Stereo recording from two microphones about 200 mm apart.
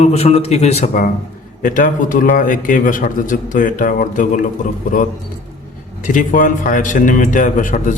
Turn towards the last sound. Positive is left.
turn(degrees=40)  # may be behind; listen again after turning